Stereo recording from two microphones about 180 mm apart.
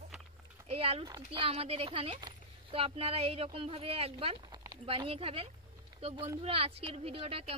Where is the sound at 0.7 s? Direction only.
35° right (ahead or behind).